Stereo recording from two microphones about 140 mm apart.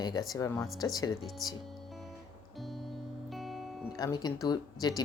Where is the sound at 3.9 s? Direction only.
30° left (ahead or behind).